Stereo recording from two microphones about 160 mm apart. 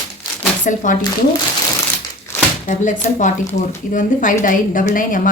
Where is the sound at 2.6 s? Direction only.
50° left (ahead or behind).